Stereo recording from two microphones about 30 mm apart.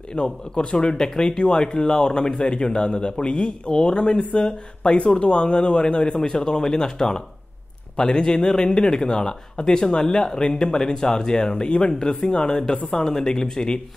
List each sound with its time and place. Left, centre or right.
0.1 s speech: left
10.8 s speech: left
12.9 s speech: centre